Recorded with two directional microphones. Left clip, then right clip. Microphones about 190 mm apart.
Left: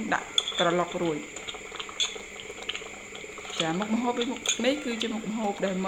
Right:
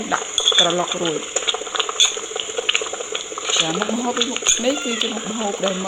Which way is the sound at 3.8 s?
45° right (ahead or behind).